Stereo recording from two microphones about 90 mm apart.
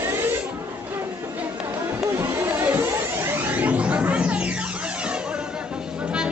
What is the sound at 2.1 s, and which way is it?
Music, 25° right (ahead or behind).